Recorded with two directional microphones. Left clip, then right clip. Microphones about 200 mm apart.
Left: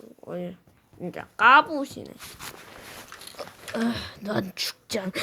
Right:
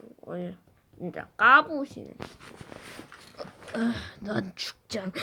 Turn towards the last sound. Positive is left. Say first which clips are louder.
# left 4 dB
turn(degrees=10)  # may be behind; listen again after turning